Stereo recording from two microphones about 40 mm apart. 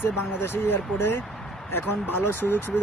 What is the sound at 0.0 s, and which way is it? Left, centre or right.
Speech, left.